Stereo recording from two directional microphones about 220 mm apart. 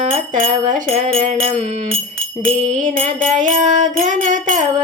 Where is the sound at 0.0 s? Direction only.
30° right (ahead or behind).